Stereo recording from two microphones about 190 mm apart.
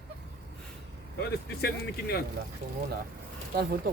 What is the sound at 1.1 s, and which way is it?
Speech, 60° left (ahead or behind).